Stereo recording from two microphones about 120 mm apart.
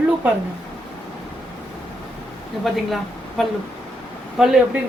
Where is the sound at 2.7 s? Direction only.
Centre (ahead or behind).